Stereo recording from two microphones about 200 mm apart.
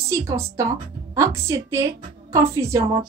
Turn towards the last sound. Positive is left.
turn(degrees=-15)  # may be behind; listen again after turning